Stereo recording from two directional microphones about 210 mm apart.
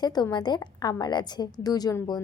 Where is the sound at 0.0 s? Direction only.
20° left (ahead or behind).